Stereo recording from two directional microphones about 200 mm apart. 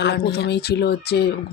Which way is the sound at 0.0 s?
55° left (ahead or behind).